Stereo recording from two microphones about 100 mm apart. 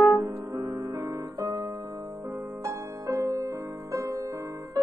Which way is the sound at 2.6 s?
30° right (ahead or behind).